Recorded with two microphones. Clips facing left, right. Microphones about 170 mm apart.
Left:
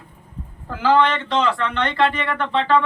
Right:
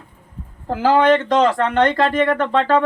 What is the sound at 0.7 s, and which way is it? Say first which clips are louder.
Speech: right 4 dB; 45° right (ahead or behind).